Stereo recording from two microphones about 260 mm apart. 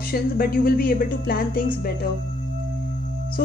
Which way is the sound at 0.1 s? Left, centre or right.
Left.